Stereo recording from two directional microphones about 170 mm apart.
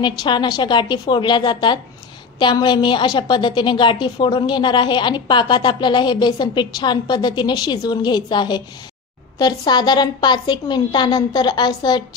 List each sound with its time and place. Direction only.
0.0 s a woman's voice: 25° left (ahead or behind)